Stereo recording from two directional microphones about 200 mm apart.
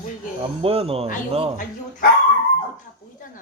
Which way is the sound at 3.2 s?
40° left (ahead or behind).